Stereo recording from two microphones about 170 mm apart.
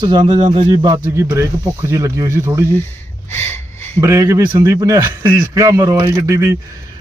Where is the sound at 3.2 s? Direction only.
15° left (ahead or behind).